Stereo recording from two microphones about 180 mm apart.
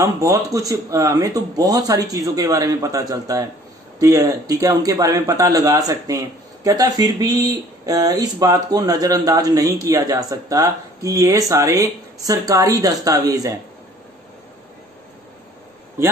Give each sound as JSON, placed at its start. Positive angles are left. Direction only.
{"t": 0.0, "sound": "a man's voice", "side_deg": -20}